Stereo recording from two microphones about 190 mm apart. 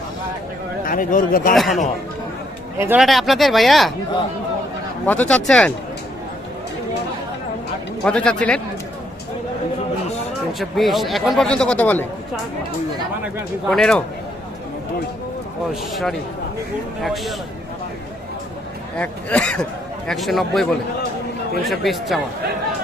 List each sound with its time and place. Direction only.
0.9 s speech: 45° left (ahead or behind)
1.5 s speech: centre (ahead or behind)
2.7 s speech: 15° right (ahead or behind)
3.0 s speech: centre (ahead or behind)
5.0 s speech: 10° left (ahead or behind)
8.0 s speech: 5° left (ahead or behind)
10.6 s speech: centre (ahead or behind)
13.2 s speech: centre (ahead or behind)
15.7 s speech: centre (ahead or behind)
18.9 s speech: 5° left (ahead or behind)